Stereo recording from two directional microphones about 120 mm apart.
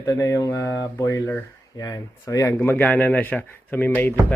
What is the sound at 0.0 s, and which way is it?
Speech, 25° left (ahead or behind).